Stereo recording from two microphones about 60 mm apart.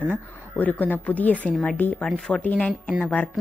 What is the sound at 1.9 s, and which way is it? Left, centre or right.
Speech, centre.